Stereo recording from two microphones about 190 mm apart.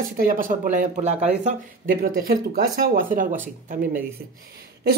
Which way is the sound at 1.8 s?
50° right (ahead or behind).